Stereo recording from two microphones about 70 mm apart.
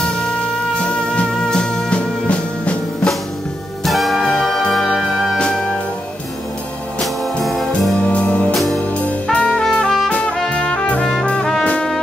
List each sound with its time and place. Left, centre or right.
0.0 s music: centre
3.8 s music: centre
5.4 s music: centre
7.0 s music: centre
8.1 s music: centre
8.5 s music: centre
8.9 s music: centre
9.6 s trumpet: centre
10.5 s brass instrument: centre